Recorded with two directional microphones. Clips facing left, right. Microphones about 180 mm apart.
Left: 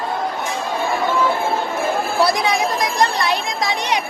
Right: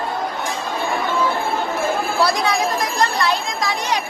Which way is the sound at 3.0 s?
20° left (ahead or behind).